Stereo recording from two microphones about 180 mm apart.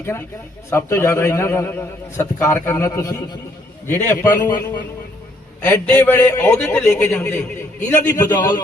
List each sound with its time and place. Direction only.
0.7 s a man's voice: 15° left (ahead or behind)
5.6 s a man's voice: 10° left (ahead or behind)
8.4 s a man's voice: 25° left (ahead or behind)